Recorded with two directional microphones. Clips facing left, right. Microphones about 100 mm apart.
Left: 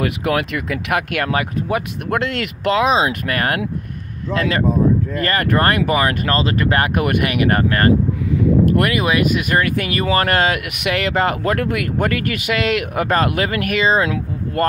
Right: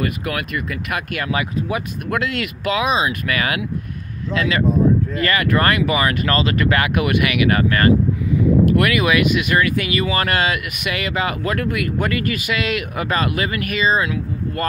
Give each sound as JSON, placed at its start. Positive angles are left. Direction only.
{"t": 0.0, "sound": "speech", "side_deg": 70}
{"t": 1.3, "sound": "speech", "side_deg": 50}
{"t": 3.1, "sound": "speech", "side_deg": 50}
{"t": 6.2, "sound": "speech", "side_deg": 35}
{"t": 8.9, "sound": "speech", "side_deg": 35}